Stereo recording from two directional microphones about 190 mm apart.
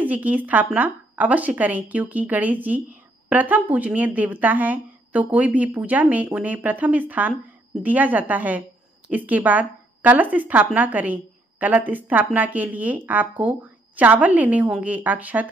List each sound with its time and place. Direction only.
0.0 s speech: 10° right (ahead or behind)